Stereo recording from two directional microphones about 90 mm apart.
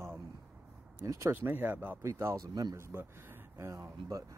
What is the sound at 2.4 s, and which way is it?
Speech, 45° right (ahead or behind).